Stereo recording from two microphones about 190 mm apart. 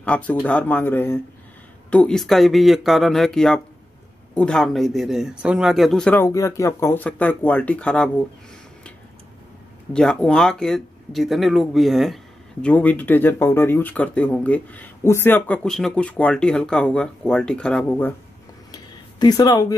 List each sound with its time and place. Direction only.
0.0 s speech: 5° left (ahead or behind)
9.9 s speech: 5° left (ahead or behind)
18.7 s a sound: 20° left (ahead or behind)